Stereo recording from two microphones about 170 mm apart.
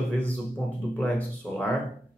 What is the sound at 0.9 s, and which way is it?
Speech, 10° left (ahead or behind).